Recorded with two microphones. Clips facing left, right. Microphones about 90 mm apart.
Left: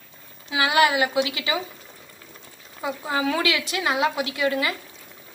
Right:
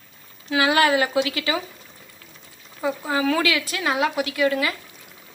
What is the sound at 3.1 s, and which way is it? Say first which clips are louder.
Speech: right 1 dB; 25° left (ahead or behind).